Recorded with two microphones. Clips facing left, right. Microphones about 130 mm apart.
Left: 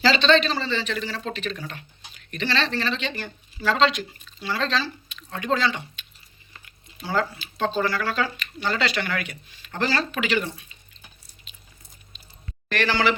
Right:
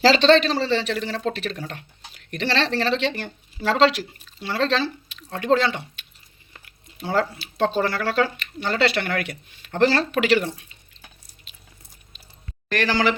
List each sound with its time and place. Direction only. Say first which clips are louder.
0.0 s speech: right 4 dB; 85° right; by 5.8 s 55° right (ahead or behind)
7.0 s speech: right 3 dB; 60° right (ahead or behind)
12.7 s a man's voice: right 1 dB; 40° right (ahead or behind)